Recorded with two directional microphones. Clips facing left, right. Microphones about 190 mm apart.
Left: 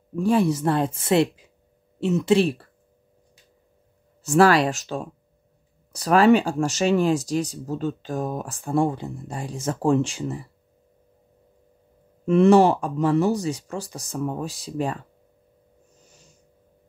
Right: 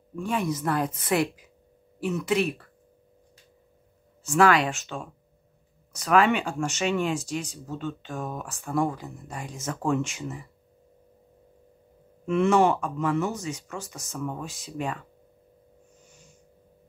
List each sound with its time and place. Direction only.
0.1 s speech: 35° left (ahead or behind)
4.2 s speech: 35° left (ahead or behind)
12.3 s speech: 35° left (ahead or behind)